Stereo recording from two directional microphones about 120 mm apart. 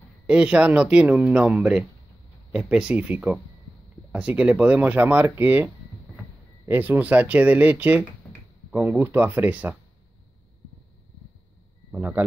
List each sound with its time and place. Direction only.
0.3 s speech: 10° right (ahead or behind)
11.9 s speech: 15° right (ahead or behind)